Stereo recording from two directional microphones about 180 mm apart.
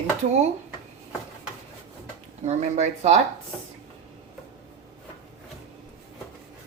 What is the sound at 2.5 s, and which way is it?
Speech, 40° right (ahead or behind).